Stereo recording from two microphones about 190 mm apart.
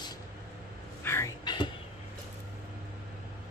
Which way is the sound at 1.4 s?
25° left (ahead or behind).